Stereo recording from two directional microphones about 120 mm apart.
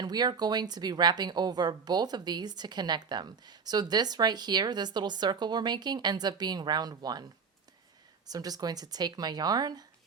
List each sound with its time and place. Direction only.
0.0 s a woman's voice: 35° right (ahead or behind)
8.3 s a woman's voice: 30° right (ahead or behind)